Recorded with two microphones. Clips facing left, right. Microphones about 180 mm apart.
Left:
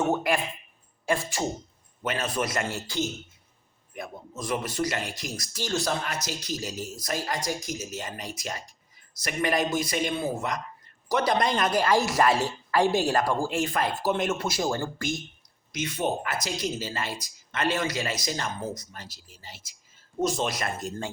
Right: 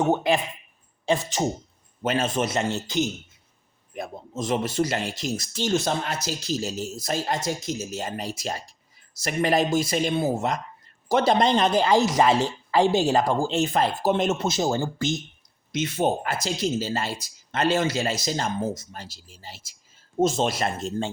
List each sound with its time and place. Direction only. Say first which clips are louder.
0.0 s speech: right 3 dB; 25° right (ahead or behind)
2.0 s speech: right 5 dB; 30° right (ahead or behind)